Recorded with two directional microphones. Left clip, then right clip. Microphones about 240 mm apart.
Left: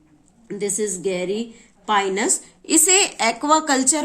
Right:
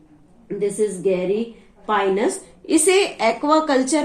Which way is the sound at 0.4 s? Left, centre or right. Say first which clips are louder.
Right 3 dB; left.